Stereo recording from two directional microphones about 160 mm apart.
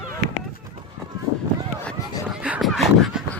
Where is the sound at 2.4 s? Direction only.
5° right (ahead or behind).